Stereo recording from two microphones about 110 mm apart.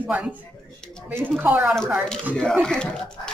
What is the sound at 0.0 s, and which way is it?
A woman's voice, 15° right (ahead or behind).